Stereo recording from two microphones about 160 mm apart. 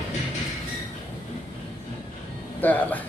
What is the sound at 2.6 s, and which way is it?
Speech, 10° left (ahead or behind).